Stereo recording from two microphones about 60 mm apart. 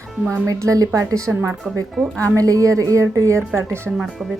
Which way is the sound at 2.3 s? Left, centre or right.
Right.